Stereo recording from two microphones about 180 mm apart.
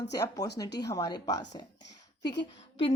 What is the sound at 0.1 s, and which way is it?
Speech, 20° left (ahead or behind).